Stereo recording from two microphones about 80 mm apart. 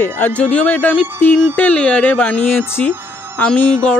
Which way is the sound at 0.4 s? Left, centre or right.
Centre.